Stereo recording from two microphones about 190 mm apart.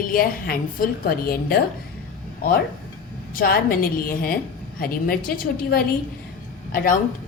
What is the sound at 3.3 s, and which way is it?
A woman's voice, 50° left (ahead or behind).